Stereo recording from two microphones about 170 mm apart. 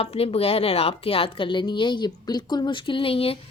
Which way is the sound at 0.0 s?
35° left (ahead or behind).